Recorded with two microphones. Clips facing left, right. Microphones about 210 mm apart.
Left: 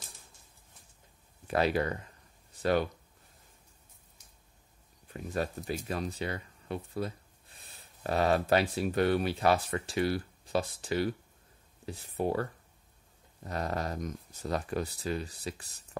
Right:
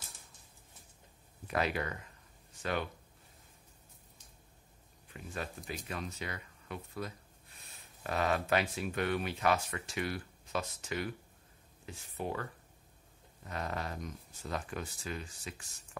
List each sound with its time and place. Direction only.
1.5 s speech: 35° left (ahead or behind)
5.1 s speech: 40° left (ahead or behind)